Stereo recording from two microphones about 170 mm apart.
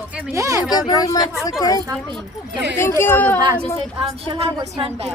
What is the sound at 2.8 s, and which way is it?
Speech, 15° left (ahead or behind).